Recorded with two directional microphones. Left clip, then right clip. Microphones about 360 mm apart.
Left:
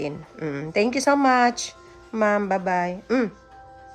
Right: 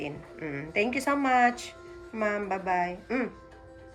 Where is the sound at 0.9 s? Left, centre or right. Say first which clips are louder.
Left 7 dB; centre.